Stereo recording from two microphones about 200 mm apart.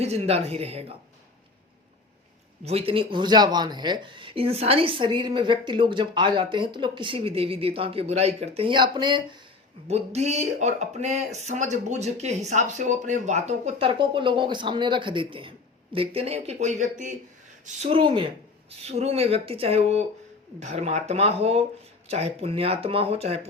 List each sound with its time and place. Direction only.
0.0 s speech: 30° right (ahead or behind)
2.6 s speech: 30° right (ahead or behind)